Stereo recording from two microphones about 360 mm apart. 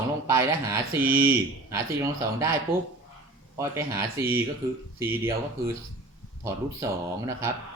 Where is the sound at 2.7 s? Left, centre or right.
Right.